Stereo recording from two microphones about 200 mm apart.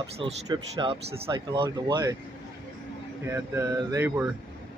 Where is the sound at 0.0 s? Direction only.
20° right (ahead or behind).